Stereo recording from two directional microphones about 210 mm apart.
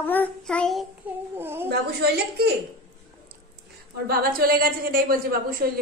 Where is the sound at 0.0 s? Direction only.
10° left (ahead or behind).